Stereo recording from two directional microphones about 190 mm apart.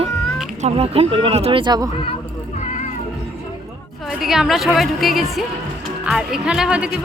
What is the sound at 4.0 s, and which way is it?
Speech, centre (ahead or behind).